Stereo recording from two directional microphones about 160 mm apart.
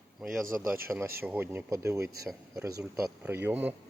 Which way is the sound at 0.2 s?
Centre (ahead or behind).